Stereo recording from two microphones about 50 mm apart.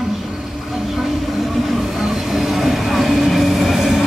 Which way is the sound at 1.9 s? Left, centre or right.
Centre.